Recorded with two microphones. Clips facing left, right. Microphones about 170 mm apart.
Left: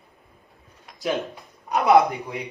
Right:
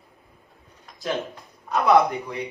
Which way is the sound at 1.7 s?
15° left (ahead or behind).